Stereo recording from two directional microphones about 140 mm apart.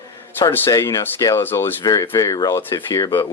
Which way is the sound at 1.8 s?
25° left (ahead or behind).